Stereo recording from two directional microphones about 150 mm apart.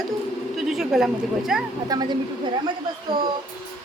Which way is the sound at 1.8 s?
25° right (ahead or behind).